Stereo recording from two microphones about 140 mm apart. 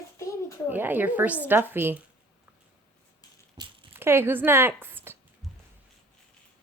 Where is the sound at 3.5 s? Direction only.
30° right (ahead or behind).